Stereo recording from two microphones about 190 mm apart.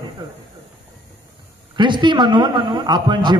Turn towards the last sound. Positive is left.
turn(degrees=-25)  # may be behind; listen again after turning